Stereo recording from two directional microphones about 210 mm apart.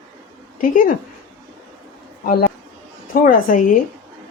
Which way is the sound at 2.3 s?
45° left (ahead or behind).